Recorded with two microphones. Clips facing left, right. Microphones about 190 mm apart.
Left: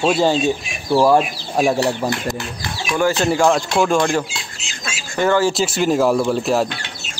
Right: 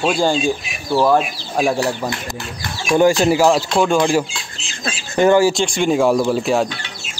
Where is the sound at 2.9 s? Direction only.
15° right (ahead or behind).